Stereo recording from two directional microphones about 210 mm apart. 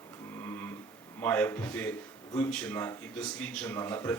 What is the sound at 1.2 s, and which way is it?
A man's voice, 10° left (ahead or behind).